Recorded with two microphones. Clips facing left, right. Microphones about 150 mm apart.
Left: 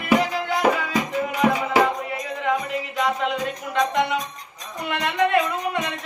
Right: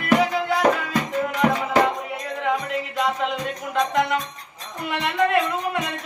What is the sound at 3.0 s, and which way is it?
Music, centre (ahead or behind).